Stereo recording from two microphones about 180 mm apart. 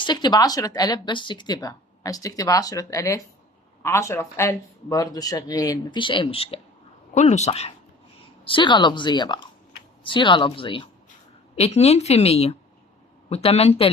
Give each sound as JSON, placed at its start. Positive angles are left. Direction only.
{"t": 0.0, "sound": "speech", "side_deg": 25}
{"t": 8.4, "sound": "speech", "side_deg": 25}